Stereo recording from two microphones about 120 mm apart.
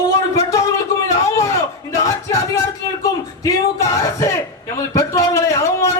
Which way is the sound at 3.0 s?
30° left (ahead or behind).